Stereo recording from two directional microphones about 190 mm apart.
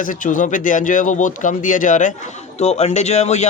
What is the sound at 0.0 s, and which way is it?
Speech, 45° left (ahead or behind).